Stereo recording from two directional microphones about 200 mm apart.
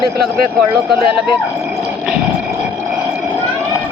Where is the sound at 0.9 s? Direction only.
25° left (ahead or behind).